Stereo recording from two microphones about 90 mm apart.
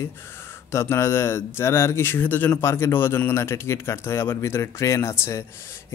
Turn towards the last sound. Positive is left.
turn(degrees=30)  # may be behind; listen again after turning